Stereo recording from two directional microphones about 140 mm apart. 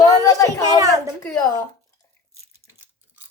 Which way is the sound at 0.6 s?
25° right (ahead or behind).